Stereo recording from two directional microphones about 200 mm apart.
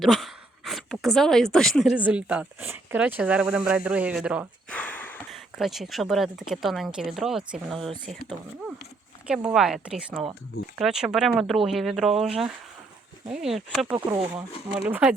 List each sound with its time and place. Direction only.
0.0 s speech: centre (ahead or behind)
4.7 s a sound: 5° left (ahead or behind)
5.5 s speech: centre (ahead or behind)
9.2 s speech: 5° right (ahead or behind)
13.2 s speech: centre (ahead or behind)
13.9 s speech: 20° right (ahead or behind)
14.7 s speech: 5° right (ahead or behind)